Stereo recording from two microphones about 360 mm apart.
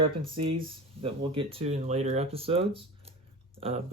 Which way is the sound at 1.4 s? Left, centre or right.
Centre.